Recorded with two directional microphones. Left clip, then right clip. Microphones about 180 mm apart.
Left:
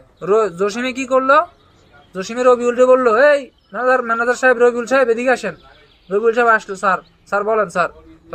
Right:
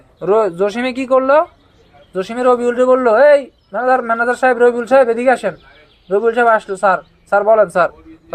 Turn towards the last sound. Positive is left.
turn(degrees=-20)  # may be behind; listen again after turning